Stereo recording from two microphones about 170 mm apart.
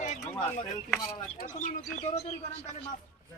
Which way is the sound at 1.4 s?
50° left (ahead or behind).